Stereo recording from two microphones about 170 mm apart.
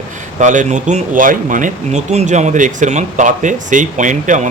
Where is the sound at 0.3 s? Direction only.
45° right (ahead or behind).